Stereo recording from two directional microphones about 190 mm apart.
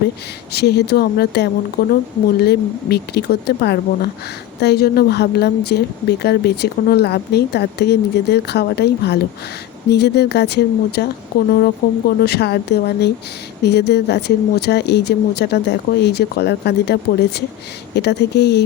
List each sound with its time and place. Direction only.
0.5 s speech: 60° left (ahead or behind)